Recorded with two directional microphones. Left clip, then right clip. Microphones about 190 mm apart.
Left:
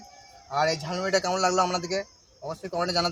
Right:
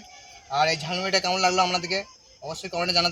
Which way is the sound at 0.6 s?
20° left (ahead or behind).